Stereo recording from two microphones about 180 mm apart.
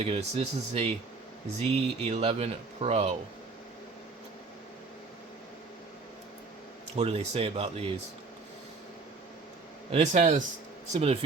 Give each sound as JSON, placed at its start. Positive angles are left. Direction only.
{"t": 0.0, "sound": "speech", "side_deg": -35}
{"t": 6.9, "sound": "speech", "side_deg": -35}
{"t": 9.9, "sound": "speech", "side_deg": -40}